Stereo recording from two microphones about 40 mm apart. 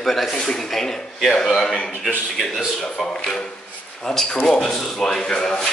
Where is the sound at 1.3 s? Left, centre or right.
Centre.